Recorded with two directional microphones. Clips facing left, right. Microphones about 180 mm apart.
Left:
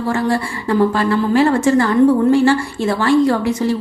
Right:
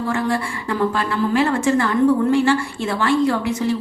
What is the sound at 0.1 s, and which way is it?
Speech, 35° left (ahead or behind).